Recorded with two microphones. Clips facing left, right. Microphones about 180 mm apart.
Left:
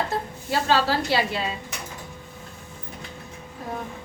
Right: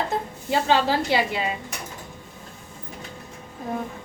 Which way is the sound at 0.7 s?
15° right (ahead or behind).